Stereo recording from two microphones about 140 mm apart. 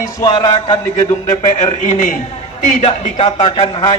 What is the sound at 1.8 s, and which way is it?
A man's voice, 60° left (ahead or behind).